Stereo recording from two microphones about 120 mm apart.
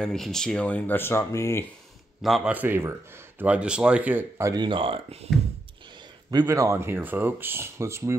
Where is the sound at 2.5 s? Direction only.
15° right (ahead or behind).